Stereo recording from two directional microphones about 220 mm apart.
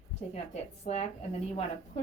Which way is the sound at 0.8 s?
30° left (ahead or behind).